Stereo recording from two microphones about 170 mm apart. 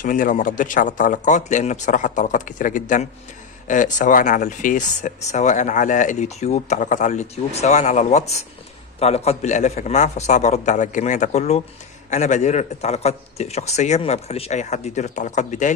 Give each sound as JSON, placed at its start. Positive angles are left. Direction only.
{"t": 0.0, "sound": "speech", "side_deg": 50}